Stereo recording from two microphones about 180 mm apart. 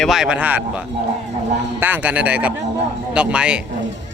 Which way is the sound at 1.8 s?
10° right (ahead or behind).